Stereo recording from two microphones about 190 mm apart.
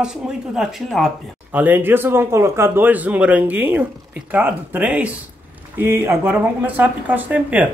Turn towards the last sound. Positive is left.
turn(degrees=-10)  # may be behind; listen again after turning